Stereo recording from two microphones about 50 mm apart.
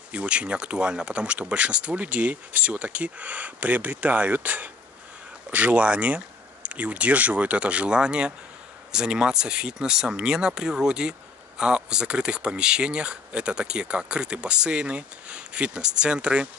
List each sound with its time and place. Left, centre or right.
0.1 s speech: right